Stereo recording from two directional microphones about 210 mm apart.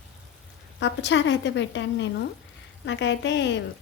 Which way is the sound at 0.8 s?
55° left (ahead or behind).